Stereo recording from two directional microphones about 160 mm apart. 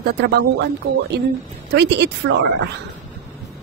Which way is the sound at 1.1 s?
90° right.